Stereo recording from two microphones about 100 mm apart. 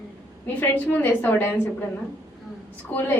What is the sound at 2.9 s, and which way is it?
Speech, 20° left (ahead or behind).